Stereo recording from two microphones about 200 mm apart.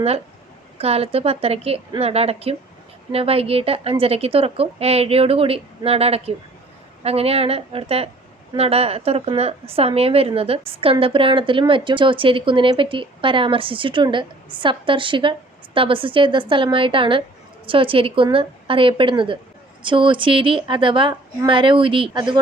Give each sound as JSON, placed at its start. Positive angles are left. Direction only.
{"t": 0.8, "sound": "a woman's voice", "side_deg": -30}